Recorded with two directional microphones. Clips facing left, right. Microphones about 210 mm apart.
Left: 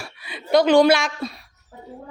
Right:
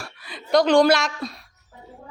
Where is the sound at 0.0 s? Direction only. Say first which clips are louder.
Left 2 dB; 5° left (ahead or behind).